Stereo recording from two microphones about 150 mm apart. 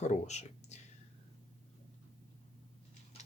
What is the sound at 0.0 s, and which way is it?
Speech, 50° left (ahead or behind).